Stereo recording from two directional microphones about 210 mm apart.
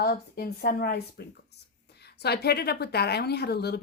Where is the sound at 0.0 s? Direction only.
45° left (ahead or behind).